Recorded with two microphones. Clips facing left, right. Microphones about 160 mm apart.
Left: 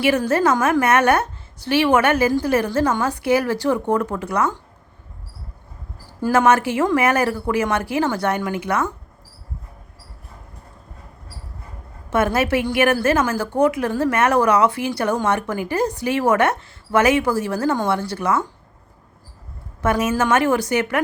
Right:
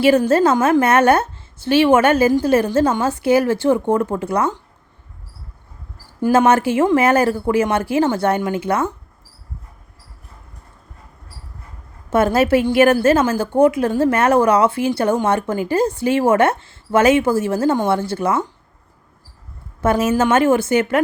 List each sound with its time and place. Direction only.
0.3 s a woman's voice: 30° right (ahead or behind)
6.2 s a woman's voice: 25° right (ahead or behind)
12.1 s a woman's voice: 30° right (ahead or behind)
19.8 s a woman's voice: 30° right (ahead or behind)